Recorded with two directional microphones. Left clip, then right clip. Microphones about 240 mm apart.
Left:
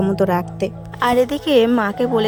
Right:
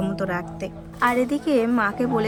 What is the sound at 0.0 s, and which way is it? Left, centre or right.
A woman's voice, left.